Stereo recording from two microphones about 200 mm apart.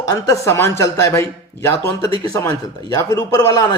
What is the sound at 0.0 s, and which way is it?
Speech, 15° left (ahead or behind).